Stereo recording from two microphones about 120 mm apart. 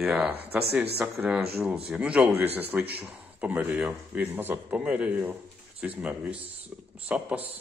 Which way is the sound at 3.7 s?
Centre (ahead or behind).